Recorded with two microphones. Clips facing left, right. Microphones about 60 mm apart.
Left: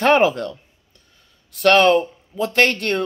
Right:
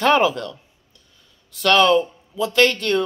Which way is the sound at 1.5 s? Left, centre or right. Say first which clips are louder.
Left 2 dB; left.